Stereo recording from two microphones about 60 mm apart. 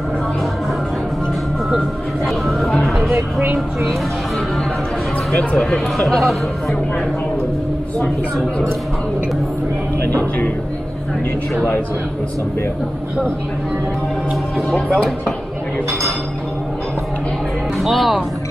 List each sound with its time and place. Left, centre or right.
2.2 s music: centre
5.3 s speech: centre
5.9 s speech: centre
17.7 s speech: centre